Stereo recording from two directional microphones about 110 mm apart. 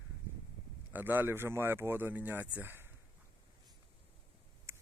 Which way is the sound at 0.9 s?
20° right (ahead or behind).